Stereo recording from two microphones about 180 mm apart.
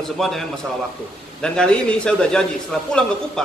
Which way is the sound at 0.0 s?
Centre (ahead or behind).